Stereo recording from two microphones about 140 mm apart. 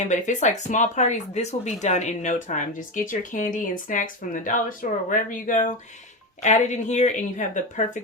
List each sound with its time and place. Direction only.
0.0 s speech: 60° left (ahead or behind)
6.4 s speech: 55° left (ahead or behind)